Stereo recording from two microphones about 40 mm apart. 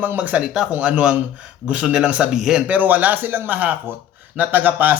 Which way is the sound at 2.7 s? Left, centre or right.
Right.